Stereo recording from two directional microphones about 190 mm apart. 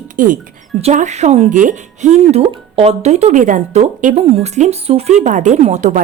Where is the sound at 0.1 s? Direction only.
45° right (ahead or behind).